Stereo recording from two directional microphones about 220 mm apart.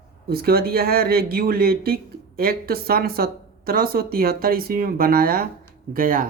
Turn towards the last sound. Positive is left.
turn(degrees=-40)  # may be behind; listen again after turning